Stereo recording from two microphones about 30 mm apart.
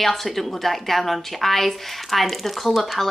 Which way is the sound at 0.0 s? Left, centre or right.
Centre.